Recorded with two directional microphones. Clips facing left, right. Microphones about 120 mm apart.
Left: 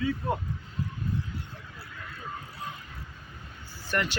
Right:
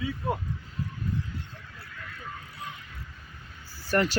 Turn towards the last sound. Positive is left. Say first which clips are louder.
# right 5 dB
turn(degrees=-35)  # may be behind; listen again after turning